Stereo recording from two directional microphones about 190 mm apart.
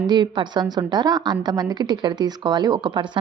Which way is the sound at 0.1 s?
25° right (ahead or behind).